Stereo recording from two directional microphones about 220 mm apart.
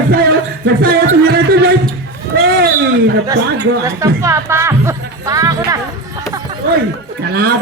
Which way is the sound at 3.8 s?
15° right (ahead or behind).